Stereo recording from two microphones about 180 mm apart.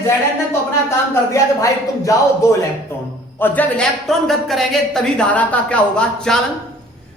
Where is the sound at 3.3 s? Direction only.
10° left (ahead or behind).